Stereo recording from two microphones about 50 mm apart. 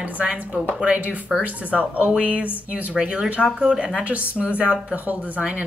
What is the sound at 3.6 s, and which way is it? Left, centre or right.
Speech, centre.